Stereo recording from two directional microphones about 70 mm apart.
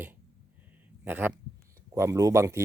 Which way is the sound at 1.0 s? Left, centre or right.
Right.